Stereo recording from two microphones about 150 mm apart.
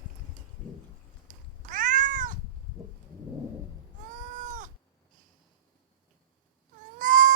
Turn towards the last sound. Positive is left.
turn(degrees=-60)  # may be behind; listen again after turning